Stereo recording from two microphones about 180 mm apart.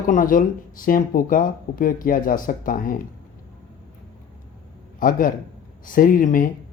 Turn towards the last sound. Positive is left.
turn(degrees=50)  # may be behind; listen again after turning